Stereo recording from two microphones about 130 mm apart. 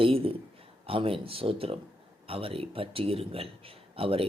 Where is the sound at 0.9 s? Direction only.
45° right (ahead or behind).